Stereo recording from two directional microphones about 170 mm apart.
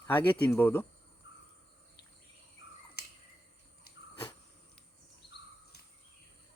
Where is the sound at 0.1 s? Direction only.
10° left (ahead or behind).